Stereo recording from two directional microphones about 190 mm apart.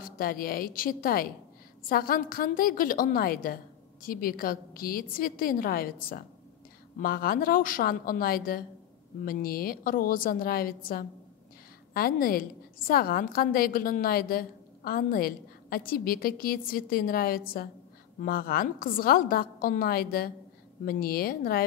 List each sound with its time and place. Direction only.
0.0 s a woman's voice: 50° left (ahead or behind)